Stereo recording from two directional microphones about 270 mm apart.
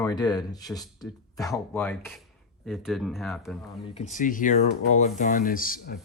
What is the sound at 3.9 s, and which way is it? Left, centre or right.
Speech, left.